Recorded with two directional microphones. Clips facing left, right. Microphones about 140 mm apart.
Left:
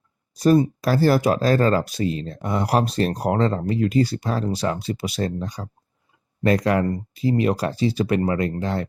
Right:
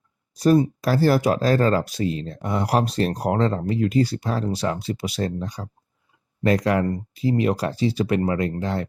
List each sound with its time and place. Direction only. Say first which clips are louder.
0.3 s speech: left 1 dB; 40° left (ahead or behind)